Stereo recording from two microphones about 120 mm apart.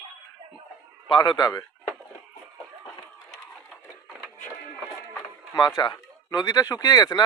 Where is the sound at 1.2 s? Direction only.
35° left (ahead or behind).